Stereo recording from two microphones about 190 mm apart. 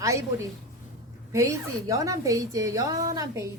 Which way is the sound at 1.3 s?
15° right (ahead or behind).